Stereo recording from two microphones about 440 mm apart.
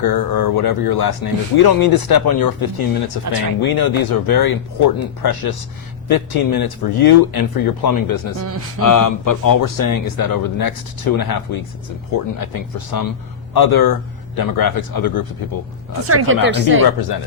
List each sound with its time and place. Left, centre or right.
0.0 s speech: left
15.9 s speech: right
16.8 s speech: left